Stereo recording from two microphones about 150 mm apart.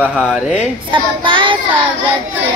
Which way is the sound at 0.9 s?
35° right (ahead or behind).